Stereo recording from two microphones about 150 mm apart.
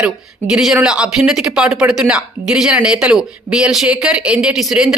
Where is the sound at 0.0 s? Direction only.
5° right (ahead or behind).